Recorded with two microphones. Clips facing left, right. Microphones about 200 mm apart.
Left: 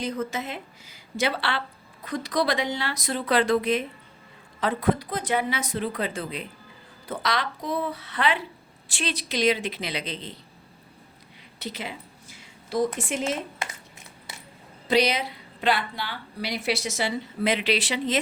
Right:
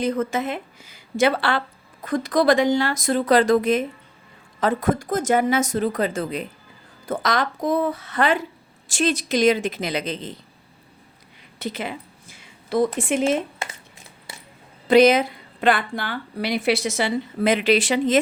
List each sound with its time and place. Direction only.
0.0 s a woman's voice: 55° right (ahead or behind)
11.6 s a woman's voice: 50° right (ahead or behind)
12.3 s a sound: 60° right (ahead or behind)
14.8 s a woman's voice: 50° right (ahead or behind)